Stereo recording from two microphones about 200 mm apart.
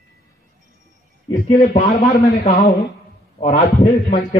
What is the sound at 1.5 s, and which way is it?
A man's voice, 40° left (ahead or behind).